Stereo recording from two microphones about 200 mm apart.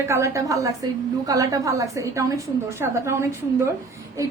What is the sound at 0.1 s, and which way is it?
A woman's voice, 15° right (ahead or behind).